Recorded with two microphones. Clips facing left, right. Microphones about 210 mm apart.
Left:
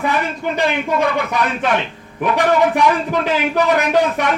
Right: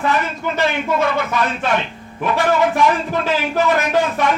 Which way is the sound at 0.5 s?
15° left (ahead or behind).